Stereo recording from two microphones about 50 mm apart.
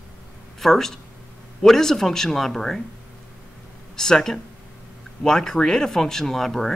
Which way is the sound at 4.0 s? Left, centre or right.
Centre.